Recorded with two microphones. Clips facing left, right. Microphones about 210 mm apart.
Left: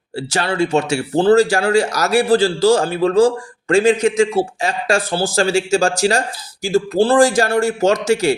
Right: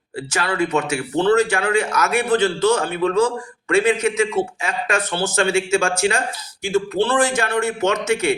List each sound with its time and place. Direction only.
0.2 s speech: 30° left (ahead or behind)